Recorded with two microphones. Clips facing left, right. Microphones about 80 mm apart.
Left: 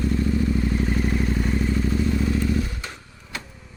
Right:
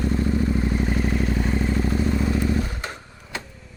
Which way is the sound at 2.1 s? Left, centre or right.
Right.